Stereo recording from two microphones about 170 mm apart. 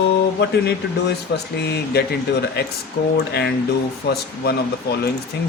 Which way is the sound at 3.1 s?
75° left (ahead or behind).